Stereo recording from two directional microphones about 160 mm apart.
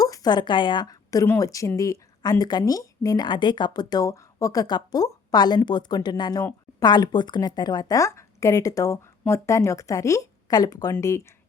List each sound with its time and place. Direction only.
0.0 s a woman's voice: 25° left (ahead or behind)